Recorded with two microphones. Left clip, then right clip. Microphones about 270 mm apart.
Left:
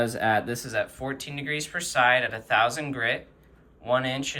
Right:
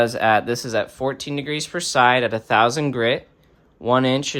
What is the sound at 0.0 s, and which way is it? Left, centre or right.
Speech, centre.